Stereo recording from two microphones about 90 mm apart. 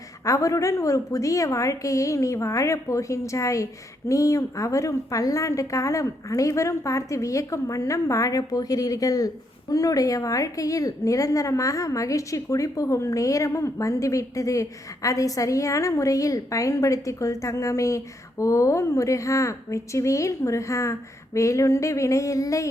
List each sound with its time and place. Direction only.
0.3 s a woman's voice: 35° left (ahead or behind)